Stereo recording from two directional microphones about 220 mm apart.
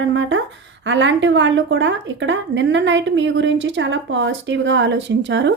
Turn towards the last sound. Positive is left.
turn(degrees=-55)  # may be behind; listen again after turning